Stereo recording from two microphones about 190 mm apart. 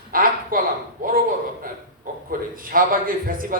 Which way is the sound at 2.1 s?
45° right (ahead or behind).